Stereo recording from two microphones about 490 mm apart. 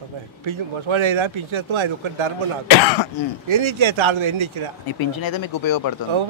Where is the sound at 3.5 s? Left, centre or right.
Right.